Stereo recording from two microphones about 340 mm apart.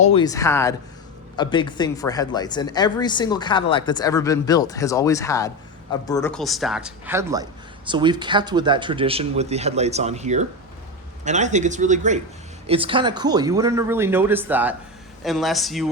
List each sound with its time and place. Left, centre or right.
0.0 s speech: centre